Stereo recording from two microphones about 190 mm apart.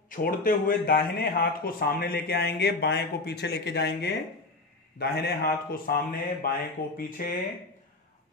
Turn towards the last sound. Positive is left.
turn(degrees=50)  # may be behind; listen again after turning